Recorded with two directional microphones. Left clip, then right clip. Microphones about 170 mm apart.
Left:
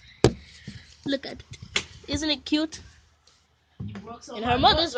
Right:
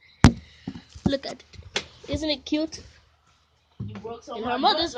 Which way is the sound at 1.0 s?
30° left (ahead or behind).